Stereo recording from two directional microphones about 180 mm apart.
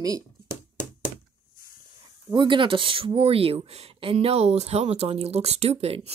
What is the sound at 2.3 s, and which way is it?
Speech, 25° right (ahead or behind).